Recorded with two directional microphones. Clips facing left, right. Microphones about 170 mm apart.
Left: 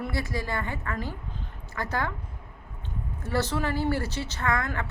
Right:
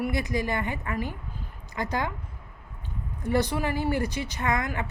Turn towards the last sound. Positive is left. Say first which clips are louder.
# right 1 dB
turn(degrees=-15)  # may be behind; listen again after turning